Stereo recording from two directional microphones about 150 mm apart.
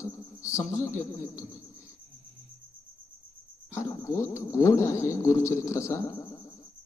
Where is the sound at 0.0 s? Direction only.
20° left (ahead or behind).